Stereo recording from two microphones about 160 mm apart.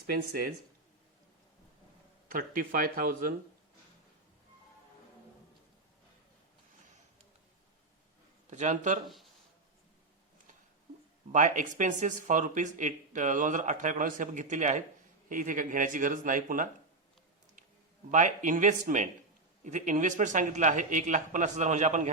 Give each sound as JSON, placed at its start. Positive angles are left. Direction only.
{"t": 2.3, "sound": "speech", "side_deg": -60}
{"t": 8.4, "sound": "speech", "side_deg": -45}
{"t": 11.3, "sound": "speech", "side_deg": -50}
{"t": 18.1, "sound": "speech", "side_deg": -50}